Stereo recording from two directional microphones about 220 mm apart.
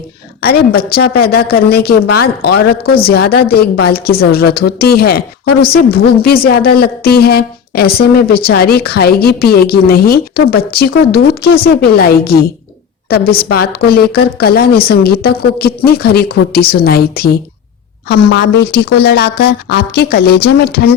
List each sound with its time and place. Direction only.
0.4 s a woman's voice: 45° left (ahead or behind)